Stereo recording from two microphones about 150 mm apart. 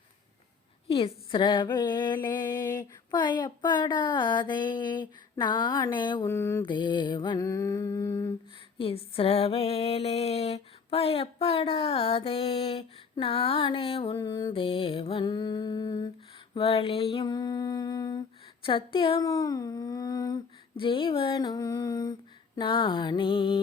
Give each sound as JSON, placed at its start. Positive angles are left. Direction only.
{"t": 0.9, "sound": "speech", "side_deg": 35}
{"t": 6.2, "sound": "speech", "side_deg": 20}
{"t": 6.7, "sound": "speech", "side_deg": 30}
{"t": 8.8, "sound": "a sound", "side_deg": 40}
{"t": 14.2, "sound": "speech", "side_deg": 25}
{"t": 16.6, "sound": "a sound", "side_deg": 35}
{"t": 19.2, "sound": "speech", "side_deg": 25}